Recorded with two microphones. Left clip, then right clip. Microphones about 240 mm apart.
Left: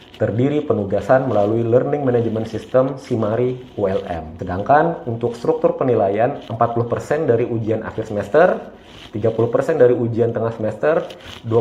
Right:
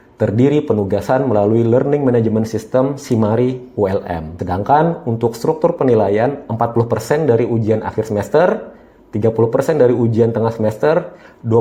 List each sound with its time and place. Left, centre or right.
0.2 s speech: right